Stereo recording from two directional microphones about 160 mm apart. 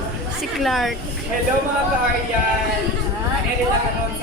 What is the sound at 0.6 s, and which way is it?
Speech, centre (ahead or behind).